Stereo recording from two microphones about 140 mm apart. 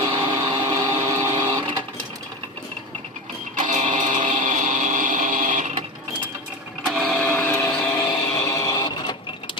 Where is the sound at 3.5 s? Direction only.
60° right (ahead or behind).